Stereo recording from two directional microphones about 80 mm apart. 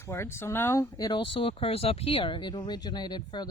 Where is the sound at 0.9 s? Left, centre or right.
Left.